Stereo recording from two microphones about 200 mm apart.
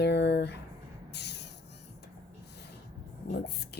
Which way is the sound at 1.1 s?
55° left (ahead or behind).